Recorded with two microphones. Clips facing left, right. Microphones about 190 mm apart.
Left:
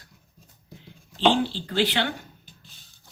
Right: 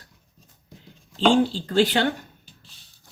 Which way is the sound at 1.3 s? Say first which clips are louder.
Right 5 dB; 45° right (ahead or behind).